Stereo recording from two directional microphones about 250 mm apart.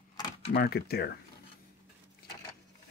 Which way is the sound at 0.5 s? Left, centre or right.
Left.